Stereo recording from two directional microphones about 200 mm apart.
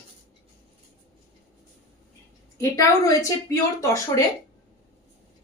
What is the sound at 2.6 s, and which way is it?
Speech, 15° left (ahead or behind).